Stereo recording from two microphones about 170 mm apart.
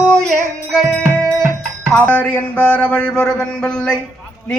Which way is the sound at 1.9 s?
5° left (ahead or behind).